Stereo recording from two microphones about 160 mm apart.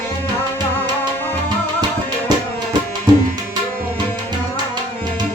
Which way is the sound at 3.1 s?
30° right (ahead or behind).